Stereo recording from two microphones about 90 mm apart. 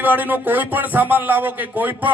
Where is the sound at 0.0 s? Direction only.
20° right (ahead or behind).